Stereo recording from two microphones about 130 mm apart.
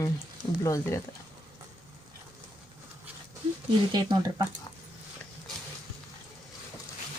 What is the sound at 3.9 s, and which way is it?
Speech, 35° right (ahead or behind).